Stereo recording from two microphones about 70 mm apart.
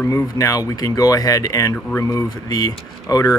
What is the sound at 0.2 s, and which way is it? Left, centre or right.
Speech, left.